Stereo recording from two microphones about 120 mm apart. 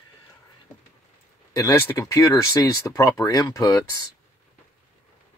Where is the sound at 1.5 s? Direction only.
25° left (ahead or behind).